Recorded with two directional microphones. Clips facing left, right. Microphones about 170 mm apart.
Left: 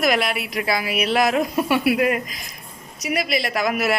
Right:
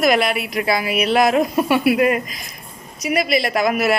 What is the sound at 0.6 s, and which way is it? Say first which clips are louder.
A woman's voice: right 3 dB; 55° right (ahead or behind).